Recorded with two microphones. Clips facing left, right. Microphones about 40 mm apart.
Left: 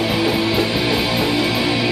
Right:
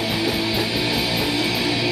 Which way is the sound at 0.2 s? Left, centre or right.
Centre.